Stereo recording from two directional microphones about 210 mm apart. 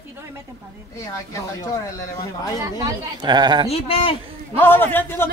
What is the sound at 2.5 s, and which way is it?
Speech, 15° right (ahead or behind).